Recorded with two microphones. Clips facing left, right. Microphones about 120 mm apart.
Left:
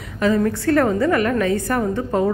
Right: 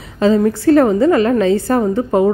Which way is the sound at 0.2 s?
25° right (ahead or behind).